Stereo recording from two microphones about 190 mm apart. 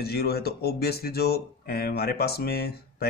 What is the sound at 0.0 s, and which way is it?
Speech, 55° left (ahead or behind).